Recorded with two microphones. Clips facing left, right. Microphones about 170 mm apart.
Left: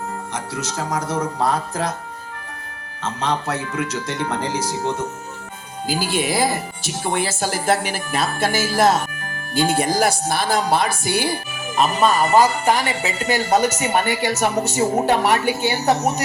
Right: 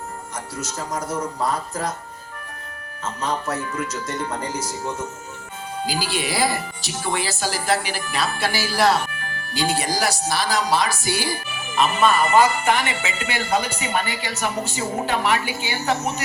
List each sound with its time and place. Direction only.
0.3 s speech: 70° left (ahead or behind)
3.0 s speech: 70° left (ahead or behind)
4.7 s speech: 65° left (ahead or behind)
5.8 s speech: 50° left (ahead or behind)
11.8 s speech: 40° left (ahead or behind)